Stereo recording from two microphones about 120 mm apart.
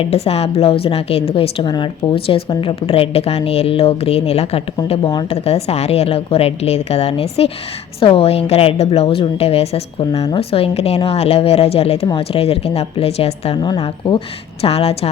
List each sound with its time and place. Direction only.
0.0 s a woman's voice: 55° left (ahead or behind)
13.6 s a woman's voice: 35° left (ahead or behind)
14.6 s a woman's voice: 55° left (ahead or behind)